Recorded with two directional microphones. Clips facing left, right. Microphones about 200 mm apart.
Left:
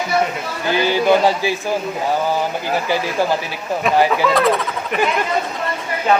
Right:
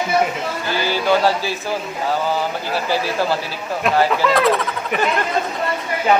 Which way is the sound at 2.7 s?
15° left (ahead or behind).